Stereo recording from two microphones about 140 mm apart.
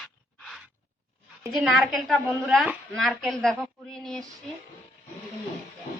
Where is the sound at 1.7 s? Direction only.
Centre (ahead or behind).